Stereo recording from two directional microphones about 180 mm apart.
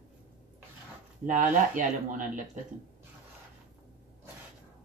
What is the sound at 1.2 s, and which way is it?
Speech, 45° right (ahead or behind).